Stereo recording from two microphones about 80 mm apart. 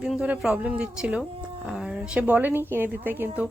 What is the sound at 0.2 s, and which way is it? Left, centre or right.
A woman's voice, centre.